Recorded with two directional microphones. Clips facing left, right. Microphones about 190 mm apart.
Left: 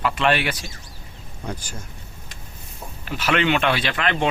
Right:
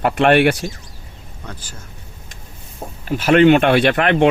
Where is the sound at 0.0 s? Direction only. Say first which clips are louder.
Right 8 dB; 55° right (ahead or behind).